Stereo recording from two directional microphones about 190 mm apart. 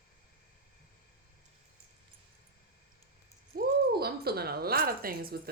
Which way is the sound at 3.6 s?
55° right (ahead or behind).